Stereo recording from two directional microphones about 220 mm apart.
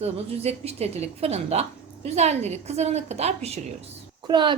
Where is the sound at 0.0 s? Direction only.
30° right (ahead or behind).